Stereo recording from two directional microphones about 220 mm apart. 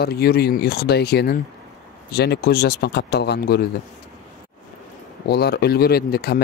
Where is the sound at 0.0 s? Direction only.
45° left (ahead or behind).